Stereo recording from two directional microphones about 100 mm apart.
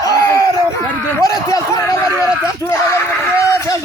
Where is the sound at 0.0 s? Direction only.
35° left (ahead or behind).